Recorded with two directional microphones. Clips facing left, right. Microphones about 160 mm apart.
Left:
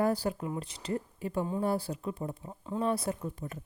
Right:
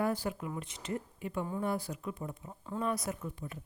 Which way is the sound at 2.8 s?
30° left (ahead or behind).